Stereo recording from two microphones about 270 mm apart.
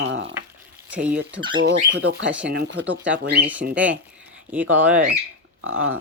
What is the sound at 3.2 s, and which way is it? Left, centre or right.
Speech, right.